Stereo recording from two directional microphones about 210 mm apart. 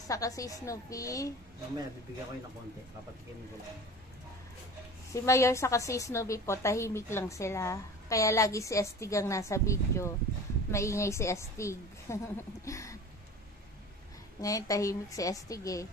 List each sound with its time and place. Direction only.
0.1 s a woman's voice: 15° left (ahead or behind)
5.1 s a woman's voice: 15° left (ahead or behind)
14.4 s a woman's voice: 15° left (ahead or behind)